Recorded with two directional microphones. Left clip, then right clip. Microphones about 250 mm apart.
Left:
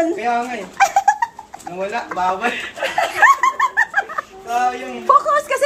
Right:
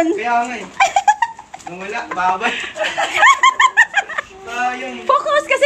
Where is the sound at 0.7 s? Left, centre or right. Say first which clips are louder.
Right 1 dB; centre.